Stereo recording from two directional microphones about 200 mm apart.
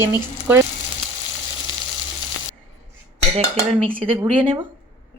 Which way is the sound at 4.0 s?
30° right (ahead or behind).